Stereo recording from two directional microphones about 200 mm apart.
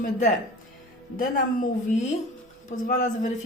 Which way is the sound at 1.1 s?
45° left (ahead or behind).